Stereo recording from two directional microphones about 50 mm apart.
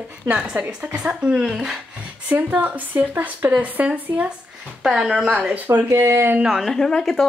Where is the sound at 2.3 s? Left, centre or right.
Right.